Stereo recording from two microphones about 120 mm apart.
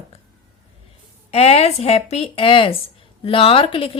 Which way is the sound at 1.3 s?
60° left (ahead or behind).